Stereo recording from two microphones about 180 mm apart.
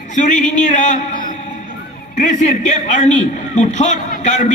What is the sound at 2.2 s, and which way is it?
A man's voice, 45° left (ahead or behind).